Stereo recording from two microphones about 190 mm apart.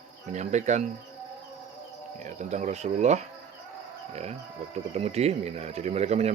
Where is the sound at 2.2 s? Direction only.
40° right (ahead or behind).